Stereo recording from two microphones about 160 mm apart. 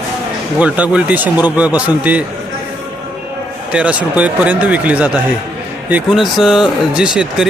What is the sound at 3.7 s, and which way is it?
A man's voice, 5° right (ahead or behind).